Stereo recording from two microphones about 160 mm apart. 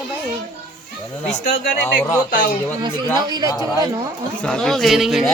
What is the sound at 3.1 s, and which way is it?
Speech, 25° right (ahead or behind).